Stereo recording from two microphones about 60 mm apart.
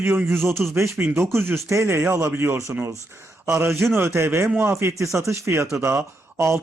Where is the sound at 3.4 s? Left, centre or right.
Right.